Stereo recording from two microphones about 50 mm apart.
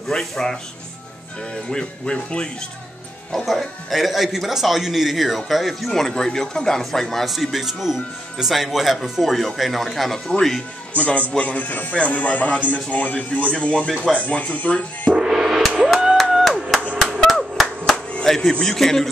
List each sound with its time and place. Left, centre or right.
0.1 s a man's voice: centre
1.7 s speech: centre
3.3 s speech: centre
11.0 s a man's voice: left
13.8 s a man's voice: centre
14.2 s speech: left
15.1 s music: centre
16.3 s a sound: centre
17.4 s clapping: centre
18.2 s a man's voice: centre